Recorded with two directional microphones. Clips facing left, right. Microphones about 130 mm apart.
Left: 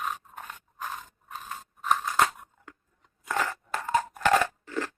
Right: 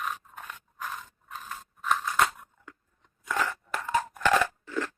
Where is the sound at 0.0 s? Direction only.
35° left (ahead or behind).